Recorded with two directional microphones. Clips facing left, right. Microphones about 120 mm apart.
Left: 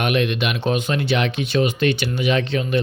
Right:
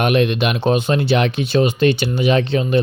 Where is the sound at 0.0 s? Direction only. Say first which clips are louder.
Right 4 dB; 35° right (ahead or behind).